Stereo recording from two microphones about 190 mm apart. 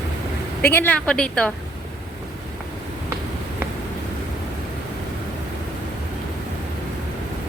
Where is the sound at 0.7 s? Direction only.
10° left (ahead or behind).